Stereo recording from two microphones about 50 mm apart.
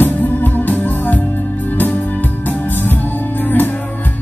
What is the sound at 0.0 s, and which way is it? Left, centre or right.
Music, left.